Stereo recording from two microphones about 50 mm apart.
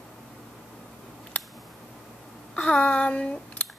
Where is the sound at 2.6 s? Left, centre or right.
Left.